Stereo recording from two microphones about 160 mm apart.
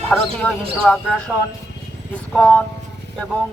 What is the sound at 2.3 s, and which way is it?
Speech, 10° left (ahead or behind).